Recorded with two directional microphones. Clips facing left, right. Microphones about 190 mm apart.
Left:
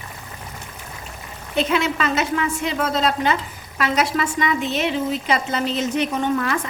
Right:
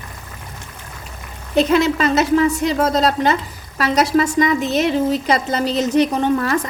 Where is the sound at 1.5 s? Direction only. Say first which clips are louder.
Right 6 dB; 40° right (ahead or behind).